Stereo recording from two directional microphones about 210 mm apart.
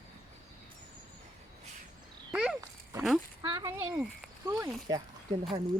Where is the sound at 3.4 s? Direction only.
20° right (ahead or behind).